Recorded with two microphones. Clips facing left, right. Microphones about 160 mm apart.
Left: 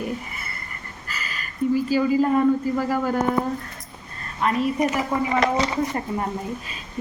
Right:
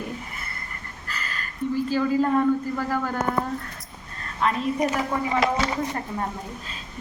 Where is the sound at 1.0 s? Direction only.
5° left (ahead or behind).